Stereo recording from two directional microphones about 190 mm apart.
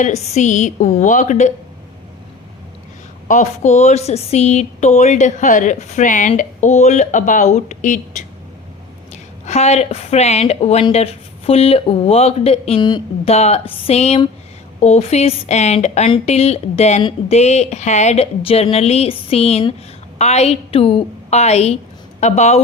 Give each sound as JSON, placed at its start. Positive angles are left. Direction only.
{"t": 0.0, "sound": "speech", "side_deg": 35}
{"t": 3.2, "sound": "speech", "side_deg": 40}
{"t": 9.5, "sound": "speech", "side_deg": 35}